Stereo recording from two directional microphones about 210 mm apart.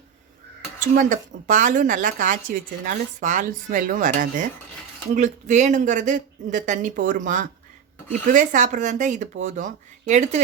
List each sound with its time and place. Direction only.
0.9 s speech: 35° right (ahead or behind)